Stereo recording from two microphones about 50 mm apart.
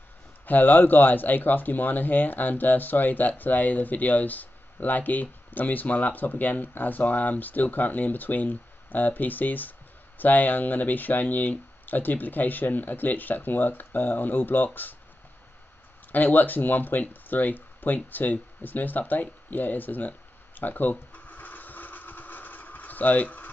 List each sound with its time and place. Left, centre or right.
0.5 s speech: left
16.1 s speech: left
19.5 s a sound: left